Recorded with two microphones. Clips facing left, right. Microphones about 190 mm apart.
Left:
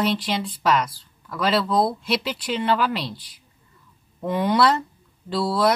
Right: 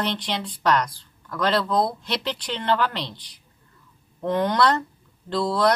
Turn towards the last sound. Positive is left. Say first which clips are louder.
# even
turn(degrees=5)  # may be behind; listen again after turning